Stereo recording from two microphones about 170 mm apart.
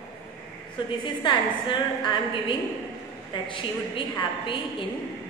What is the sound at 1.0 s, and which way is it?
Speech, 30° left (ahead or behind).